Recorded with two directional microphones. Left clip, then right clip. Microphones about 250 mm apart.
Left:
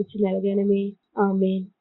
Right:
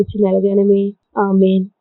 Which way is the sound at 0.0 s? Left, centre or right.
Right.